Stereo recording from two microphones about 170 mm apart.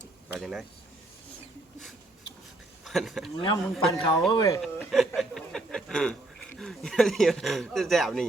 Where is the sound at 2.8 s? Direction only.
Centre (ahead or behind).